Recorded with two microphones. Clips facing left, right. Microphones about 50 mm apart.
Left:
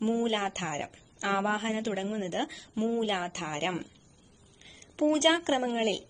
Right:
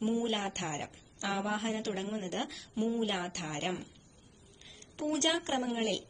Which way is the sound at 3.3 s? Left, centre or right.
Left.